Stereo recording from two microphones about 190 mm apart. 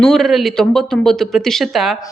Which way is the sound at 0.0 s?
Centre (ahead or behind).